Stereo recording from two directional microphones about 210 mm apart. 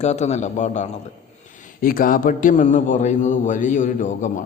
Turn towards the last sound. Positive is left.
turn(degrees=35)  # may be behind; listen again after turning